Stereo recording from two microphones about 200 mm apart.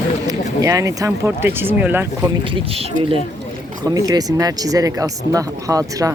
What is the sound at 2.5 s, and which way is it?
Speech, 30° right (ahead or behind).